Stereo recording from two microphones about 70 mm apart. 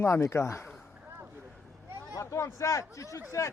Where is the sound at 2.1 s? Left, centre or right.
Left.